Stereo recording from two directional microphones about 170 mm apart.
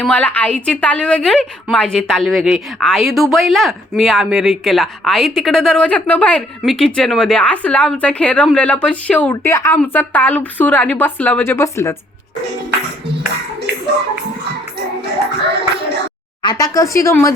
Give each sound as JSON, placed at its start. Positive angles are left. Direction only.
{"t": 0.0, "sound": "a woman's voice", "side_deg": 10}
{"t": 16.4, "sound": "speech", "side_deg": 25}